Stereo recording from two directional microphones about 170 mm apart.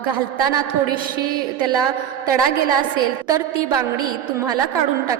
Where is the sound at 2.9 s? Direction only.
20° right (ahead or behind).